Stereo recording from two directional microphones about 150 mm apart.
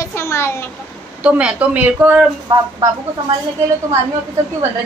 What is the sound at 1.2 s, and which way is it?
A woman's voice, 10° right (ahead or behind).